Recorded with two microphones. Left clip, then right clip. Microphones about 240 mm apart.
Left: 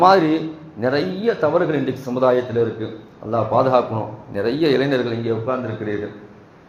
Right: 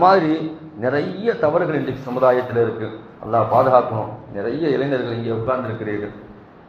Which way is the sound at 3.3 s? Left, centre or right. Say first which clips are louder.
Right 2 dB; left.